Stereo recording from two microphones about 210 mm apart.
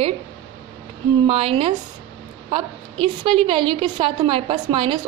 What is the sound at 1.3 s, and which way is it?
A woman's voice, 25° right (ahead or behind).